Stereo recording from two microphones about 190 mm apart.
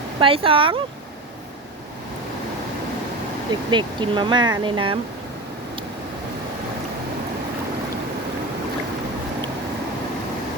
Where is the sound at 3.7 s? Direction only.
25° right (ahead or behind).